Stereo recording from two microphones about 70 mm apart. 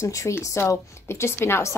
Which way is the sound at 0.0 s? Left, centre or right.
Left.